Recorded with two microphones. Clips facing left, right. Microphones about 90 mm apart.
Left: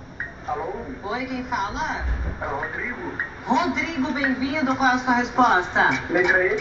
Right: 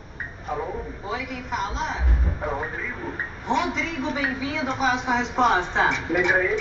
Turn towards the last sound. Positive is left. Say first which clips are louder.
# left 2 dB
turn(degrees=5)  # may be behind; listen again after turning